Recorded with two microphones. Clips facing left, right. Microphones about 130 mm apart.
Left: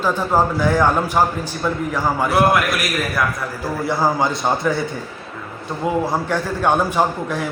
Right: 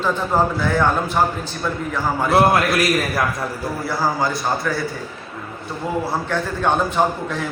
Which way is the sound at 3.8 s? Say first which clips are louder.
Left 3 dB; 20° left (ahead or behind).